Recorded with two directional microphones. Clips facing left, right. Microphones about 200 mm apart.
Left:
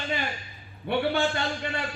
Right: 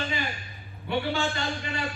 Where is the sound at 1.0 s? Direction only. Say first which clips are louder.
Left 3 dB; 55° left (ahead or behind).